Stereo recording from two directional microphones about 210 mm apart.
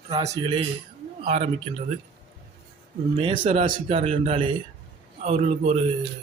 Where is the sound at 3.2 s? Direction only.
25° right (ahead or behind).